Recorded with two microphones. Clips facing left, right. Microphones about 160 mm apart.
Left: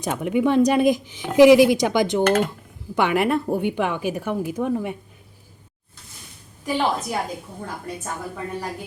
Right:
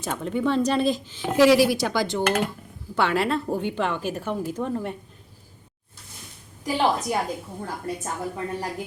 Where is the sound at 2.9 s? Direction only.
15° left (ahead or behind).